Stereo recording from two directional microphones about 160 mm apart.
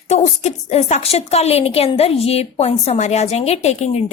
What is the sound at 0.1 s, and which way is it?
A woman's voice, 45° left (ahead or behind).